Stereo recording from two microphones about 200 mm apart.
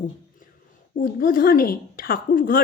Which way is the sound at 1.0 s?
45° left (ahead or behind).